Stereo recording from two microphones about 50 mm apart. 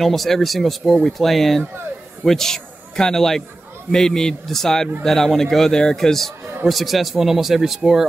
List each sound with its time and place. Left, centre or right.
0.0 s a man's voice: centre